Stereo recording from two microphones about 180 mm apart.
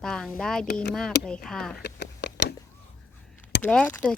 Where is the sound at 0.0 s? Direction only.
5° left (ahead or behind).